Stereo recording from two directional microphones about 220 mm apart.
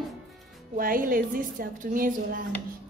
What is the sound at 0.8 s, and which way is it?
A woman's voice, 40° right (ahead or behind).